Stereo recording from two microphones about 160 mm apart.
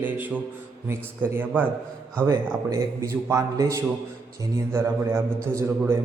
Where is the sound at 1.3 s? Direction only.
15° right (ahead or behind).